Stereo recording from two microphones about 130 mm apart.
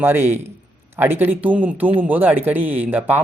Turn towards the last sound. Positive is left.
turn(degrees=-15)  # may be behind; listen again after turning